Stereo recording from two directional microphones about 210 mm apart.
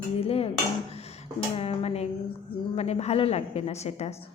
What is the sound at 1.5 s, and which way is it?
A woman's voice, 30° left (ahead or behind).